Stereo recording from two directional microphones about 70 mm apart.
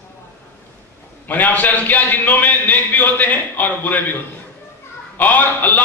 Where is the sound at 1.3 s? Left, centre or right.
Left.